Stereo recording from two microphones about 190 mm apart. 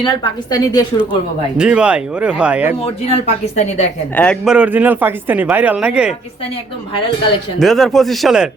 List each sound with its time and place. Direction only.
0.0 s a woman's voice: 20° left (ahead or behind)
1.5 s speech: 5° right (ahead or behind)
2.8 s speech: 35° left (ahead or behind)
4.1 s a man's voice: 10° left (ahead or behind)
4.4 s speech: 5° right (ahead or behind)
7.6 s speech: centre (ahead or behind)